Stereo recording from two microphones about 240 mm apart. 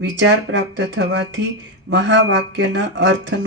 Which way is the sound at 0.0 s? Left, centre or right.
Right.